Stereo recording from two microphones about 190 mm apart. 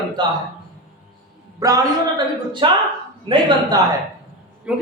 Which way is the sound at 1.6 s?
20° right (ahead or behind).